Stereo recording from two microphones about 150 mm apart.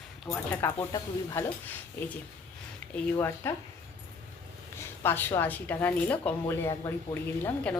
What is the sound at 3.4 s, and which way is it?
Speech, 15° left (ahead or behind).